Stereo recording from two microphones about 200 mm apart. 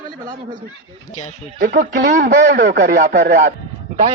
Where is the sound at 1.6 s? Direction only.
50° right (ahead or behind).